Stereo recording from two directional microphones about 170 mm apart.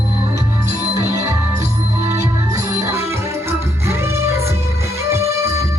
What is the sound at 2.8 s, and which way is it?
Music, 15° right (ahead or behind).